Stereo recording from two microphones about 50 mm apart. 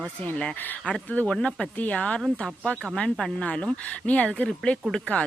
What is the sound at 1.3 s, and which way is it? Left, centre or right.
Speech, centre.